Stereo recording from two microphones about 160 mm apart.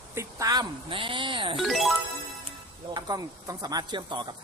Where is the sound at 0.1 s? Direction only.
20° right (ahead or behind).